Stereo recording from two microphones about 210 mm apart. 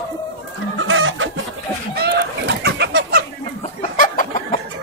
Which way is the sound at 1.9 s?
50° right (ahead or behind).